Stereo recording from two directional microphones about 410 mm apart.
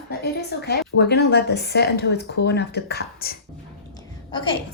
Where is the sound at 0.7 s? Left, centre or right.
Left.